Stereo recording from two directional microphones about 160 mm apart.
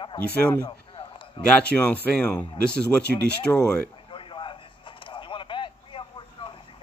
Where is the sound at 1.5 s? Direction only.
10° left (ahead or behind).